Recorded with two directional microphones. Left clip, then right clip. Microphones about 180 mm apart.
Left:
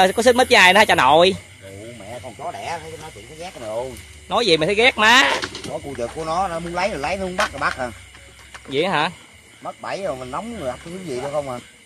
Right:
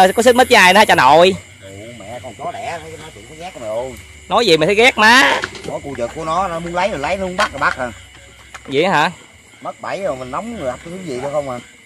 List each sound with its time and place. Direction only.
0.0 s speech: 15° right (ahead or behind)
3.6 s speech: 5° left (ahead or behind)
4.3 s speech: 20° right (ahead or behind)